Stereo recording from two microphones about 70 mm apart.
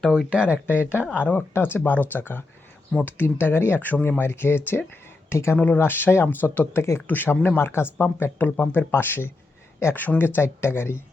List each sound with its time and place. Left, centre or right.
0.3 s speech: centre
1.1 s speech: left
5.5 s speech: left
7.6 s speech: left